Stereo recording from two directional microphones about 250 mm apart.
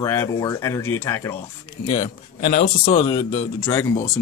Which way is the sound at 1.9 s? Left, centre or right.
Left.